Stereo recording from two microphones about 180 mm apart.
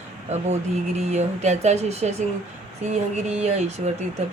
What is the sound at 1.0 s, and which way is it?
Speech, 40° right (ahead or behind).